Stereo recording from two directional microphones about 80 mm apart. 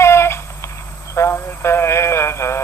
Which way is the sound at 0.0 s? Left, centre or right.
Left.